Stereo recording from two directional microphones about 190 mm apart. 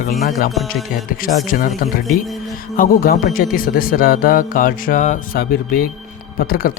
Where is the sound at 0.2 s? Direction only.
45° left (ahead or behind).